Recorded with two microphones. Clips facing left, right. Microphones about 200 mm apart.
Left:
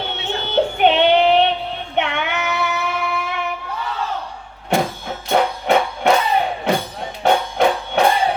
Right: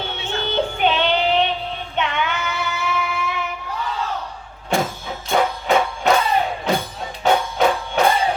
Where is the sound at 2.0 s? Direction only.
60° left (ahead or behind).